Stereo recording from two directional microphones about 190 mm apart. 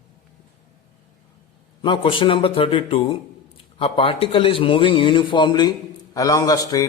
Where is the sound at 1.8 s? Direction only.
25° left (ahead or behind).